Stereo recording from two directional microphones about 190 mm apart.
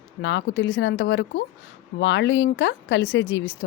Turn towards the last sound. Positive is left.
turn(degrees=90)